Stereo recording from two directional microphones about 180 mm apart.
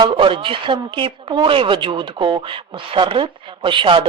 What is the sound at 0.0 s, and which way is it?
A woman's voice, 25° right (ahead or behind).